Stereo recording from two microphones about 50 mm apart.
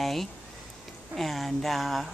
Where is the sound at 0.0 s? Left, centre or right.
Centre.